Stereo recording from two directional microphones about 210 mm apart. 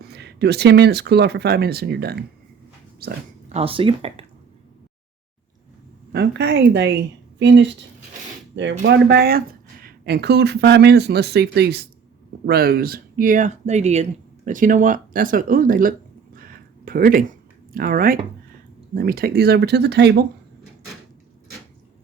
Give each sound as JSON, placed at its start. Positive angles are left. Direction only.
{"t": 0.0, "sound": "speech", "side_deg": -50}
{"t": 3.5, "sound": "speech", "side_deg": -25}
{"t": 6.1, "sound": "speech", "side_deg": -55}